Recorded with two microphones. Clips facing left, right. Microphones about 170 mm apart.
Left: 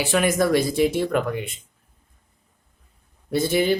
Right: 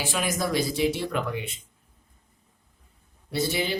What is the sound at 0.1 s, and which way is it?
A woman's voice, 60° left (ahead or behind).